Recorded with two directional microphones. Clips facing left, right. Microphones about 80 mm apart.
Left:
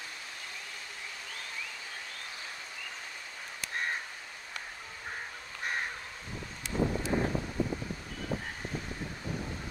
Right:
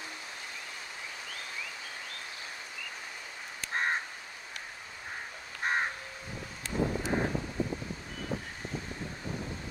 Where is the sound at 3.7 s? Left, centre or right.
Right.